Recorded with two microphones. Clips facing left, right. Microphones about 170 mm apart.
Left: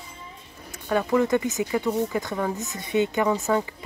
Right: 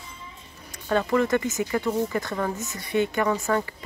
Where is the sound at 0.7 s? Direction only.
10° left (ahead or behind).